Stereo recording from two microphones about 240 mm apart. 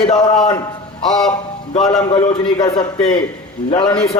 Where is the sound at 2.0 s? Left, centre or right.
Left.